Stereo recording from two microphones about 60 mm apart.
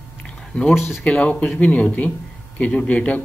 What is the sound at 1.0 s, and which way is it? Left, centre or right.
A man's voice, left.